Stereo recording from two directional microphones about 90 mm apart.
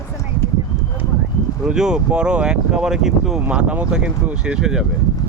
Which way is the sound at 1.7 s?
10° right (ahead or behind).